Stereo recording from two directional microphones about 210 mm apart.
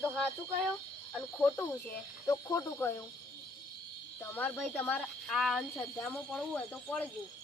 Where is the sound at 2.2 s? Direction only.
15° left (ahead or behind).